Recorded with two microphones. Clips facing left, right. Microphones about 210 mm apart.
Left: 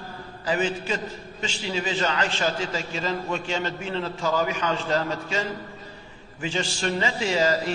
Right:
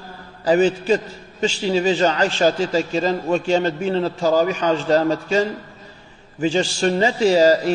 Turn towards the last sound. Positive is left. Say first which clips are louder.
# right 9 dB
turn(degrees=-40)  # may be behind; listen again after turning